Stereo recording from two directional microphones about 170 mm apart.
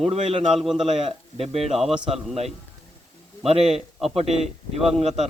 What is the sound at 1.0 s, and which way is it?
Speech, 35° right (ahead or behind).